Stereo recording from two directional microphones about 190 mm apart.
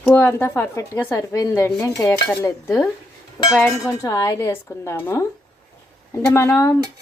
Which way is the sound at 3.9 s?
20° left (ahead or behind).